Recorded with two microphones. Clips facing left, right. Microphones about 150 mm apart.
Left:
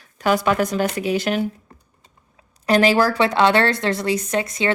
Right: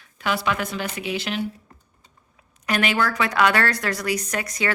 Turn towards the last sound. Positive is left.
turn(degrees=25)  # may be behind; listen again after turning